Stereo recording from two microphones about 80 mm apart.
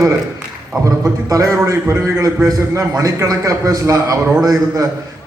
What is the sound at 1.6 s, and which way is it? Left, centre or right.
A man's voice, right.